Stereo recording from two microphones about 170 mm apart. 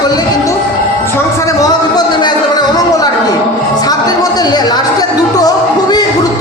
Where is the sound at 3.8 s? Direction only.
25° left (ahead or behind).